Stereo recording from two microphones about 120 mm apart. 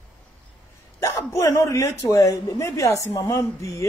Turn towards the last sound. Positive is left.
turn(degrees=25)  # may be behind; listen again after turning